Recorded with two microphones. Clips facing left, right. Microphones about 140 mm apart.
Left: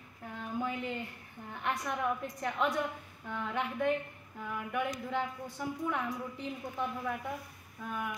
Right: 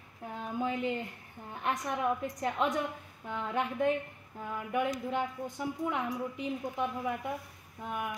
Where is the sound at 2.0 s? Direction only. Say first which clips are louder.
Right 3 dB; 20° right (ahead or behind).